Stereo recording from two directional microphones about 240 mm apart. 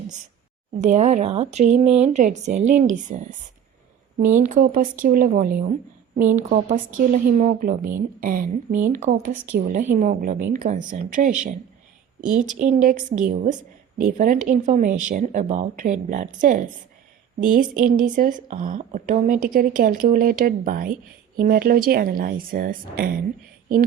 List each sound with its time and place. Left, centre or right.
0.8 s speech: right